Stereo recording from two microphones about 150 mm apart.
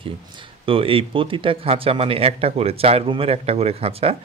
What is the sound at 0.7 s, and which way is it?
Speech, 35° right (ahead or behind).